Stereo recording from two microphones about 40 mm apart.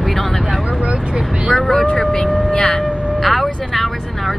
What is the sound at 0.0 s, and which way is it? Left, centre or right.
Vehicle, centre.